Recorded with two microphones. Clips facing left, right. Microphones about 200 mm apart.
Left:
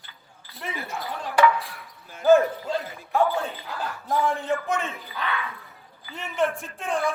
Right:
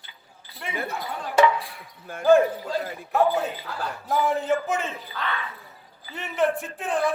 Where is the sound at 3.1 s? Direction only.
5° right (ahead or behind).